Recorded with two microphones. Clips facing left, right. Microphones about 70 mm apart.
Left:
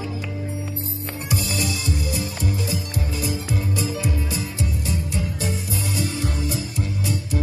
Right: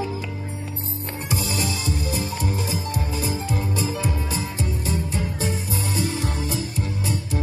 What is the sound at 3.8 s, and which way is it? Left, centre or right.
Music, right.